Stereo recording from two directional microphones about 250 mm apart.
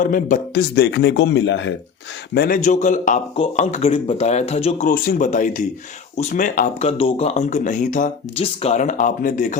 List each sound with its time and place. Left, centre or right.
0.0 s a man's voice: left